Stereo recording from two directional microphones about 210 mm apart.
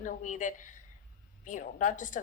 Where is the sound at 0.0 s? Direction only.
35° left (ahead or behind).